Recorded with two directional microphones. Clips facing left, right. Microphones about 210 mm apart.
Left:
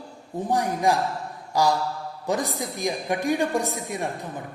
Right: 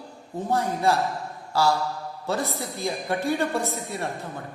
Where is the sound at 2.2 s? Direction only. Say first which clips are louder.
Left 2 dB; 15° left (ahead or behind).